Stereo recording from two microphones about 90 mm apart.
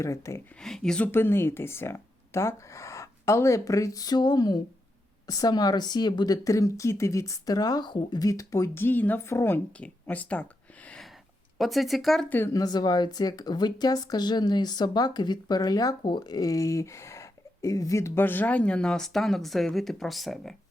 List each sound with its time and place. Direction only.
0.0 s speech: 35° left (ahead or behind)
0.6 s speech: 5° left (ahead or behind)
1.0 s speech: 25° left (ahead or behind); by 8.3 s 55° left (ahead or behind)
8.3 s speech: 35° left (ahead or behind)
9.8 s speech: 15° left (ahead or behind)
11.5 s speech: centre (ahead or behind)
12.5 s speech: 45° left (ahead or behind)
16.0 s speech: 55° left (ahead or behind); by 20.6 s 5° left (ahead or behind)